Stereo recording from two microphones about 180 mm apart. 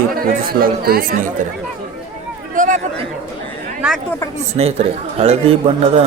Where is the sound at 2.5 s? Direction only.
45° right (ahead or behind).